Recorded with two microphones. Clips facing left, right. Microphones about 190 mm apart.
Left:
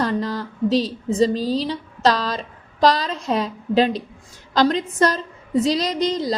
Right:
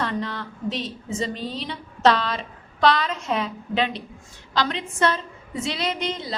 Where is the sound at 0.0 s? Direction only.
35° left (ahead or behind).